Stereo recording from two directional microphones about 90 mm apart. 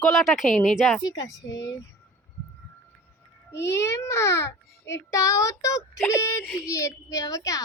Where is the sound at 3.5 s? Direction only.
30° left (ahead or behind).